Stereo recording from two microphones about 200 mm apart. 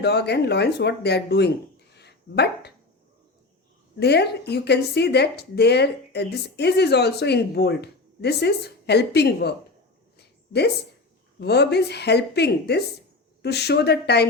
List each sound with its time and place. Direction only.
0.0 s speech: 55° left (ahead or behind)
2.0 s dog: 55° left (ahead or behind)
4.0 s speech: 55° left (ahead or behind)
10.2 s a sound: 55° left (ahead or behind)
11.3 s speech: 55° left (ahead or behind)